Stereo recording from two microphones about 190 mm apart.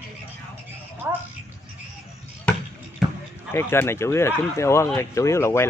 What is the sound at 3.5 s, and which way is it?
Speech, 10° left (ahead or behind).